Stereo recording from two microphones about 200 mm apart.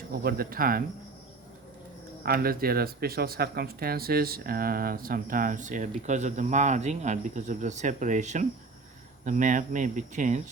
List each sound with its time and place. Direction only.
0.1 s speech: 50° right (ahead or behind)
2.2 s speech: 50° right (ahead or behind)